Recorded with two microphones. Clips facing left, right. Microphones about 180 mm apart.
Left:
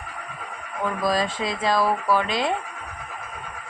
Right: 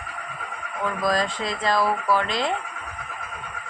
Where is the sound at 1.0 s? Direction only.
5° left (ahead or behind).